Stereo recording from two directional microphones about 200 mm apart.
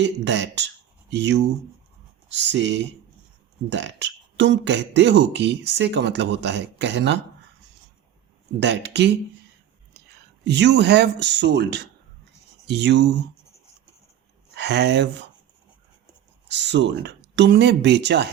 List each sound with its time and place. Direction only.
0.0 s speech: 60° right (ahead or behind)
8.6 s speech: 60° right (ahead or behind)
10.4 s speech: 60° right (ahead or behind)
14.5 s speech: 60° right (ahead or behind)
16.5 s speech: 60° right (ahead or behind)